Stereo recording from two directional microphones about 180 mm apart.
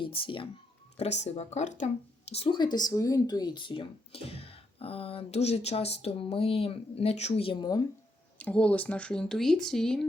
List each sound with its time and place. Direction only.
0.0 s speech: 30° left (ahead or behind)
2.3 s speech: 30° left (ahead or behind)
8.4 s speech: 5° left (ahead or behind)